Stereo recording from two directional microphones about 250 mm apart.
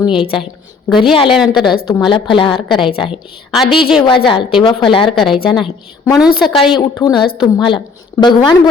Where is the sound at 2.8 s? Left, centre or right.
Centre.